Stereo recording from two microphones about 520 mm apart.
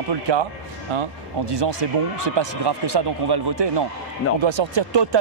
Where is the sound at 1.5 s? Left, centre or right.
Right.